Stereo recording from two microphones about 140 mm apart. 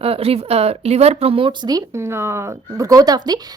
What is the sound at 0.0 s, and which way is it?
Speech, 45° right (ahead or behind).